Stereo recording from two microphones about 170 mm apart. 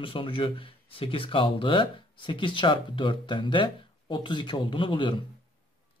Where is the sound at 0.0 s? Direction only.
30° left (ahead or behind).